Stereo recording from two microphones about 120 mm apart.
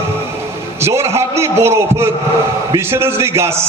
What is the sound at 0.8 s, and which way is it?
A man's voice, 25° right (ahead or behind).